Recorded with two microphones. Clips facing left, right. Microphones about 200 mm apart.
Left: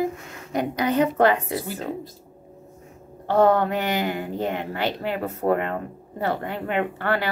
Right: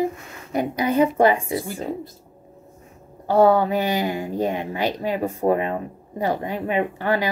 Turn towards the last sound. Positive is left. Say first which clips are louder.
# right 2 dB
turn(degrees=-15)  # may be behind; listen again after turning